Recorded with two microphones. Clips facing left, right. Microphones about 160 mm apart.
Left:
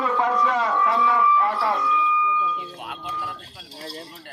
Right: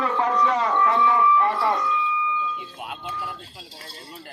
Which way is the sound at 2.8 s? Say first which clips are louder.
Even; 5° right (ahead or behind).